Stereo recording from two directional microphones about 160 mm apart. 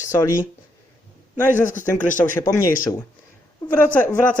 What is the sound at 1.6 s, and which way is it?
Speech, 55° left (ahead or behind).